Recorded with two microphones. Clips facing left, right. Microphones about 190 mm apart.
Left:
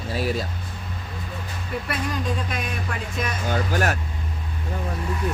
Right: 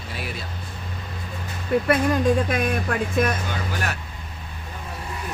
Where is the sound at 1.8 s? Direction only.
50° right (ahead or behind).